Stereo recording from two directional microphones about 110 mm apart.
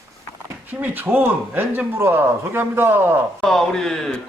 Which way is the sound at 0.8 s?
15° right (ahead or behind).